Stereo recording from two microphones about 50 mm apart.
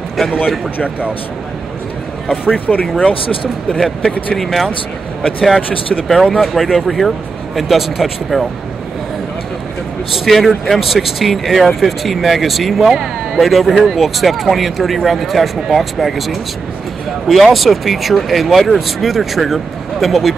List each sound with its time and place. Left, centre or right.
2.5 s speech: left
3.7 s speech: centre
6.0 s speech: centre
10.1 s speech: centre